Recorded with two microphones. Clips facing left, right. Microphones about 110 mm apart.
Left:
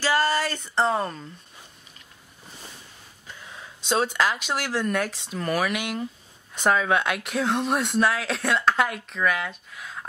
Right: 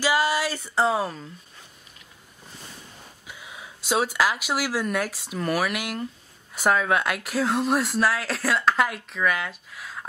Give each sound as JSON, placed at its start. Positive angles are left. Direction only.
{"t": 0.0, "sound": "speech", "side_deg": -10}
{"t": 3.3, "sound": "speech", "side_deg": -10}